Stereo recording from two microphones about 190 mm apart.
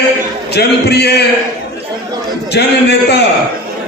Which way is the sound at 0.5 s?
60° left (ahead or behind).